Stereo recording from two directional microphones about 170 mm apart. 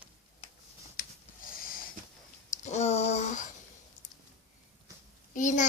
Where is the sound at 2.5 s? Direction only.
45° left (ahead or behind).